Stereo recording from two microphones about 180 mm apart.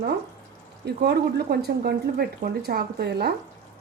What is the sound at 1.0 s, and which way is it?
Speech, 60° right (ahead or behind).